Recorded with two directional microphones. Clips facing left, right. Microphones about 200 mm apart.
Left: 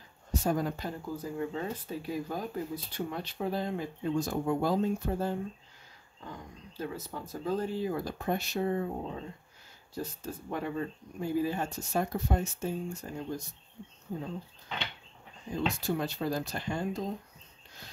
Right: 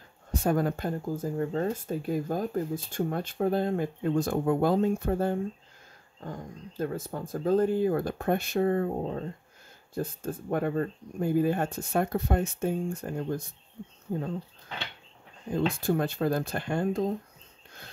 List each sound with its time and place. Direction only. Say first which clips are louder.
0.3 s speech: right 4 dB; 55° right (ahead or behind)
15.5 s speech: right 5 dB; 55° right (ahead or behind)